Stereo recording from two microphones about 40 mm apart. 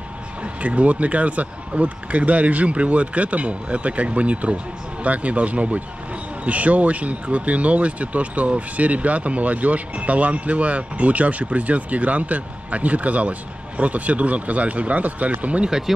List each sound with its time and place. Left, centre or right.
0.4 s speech: right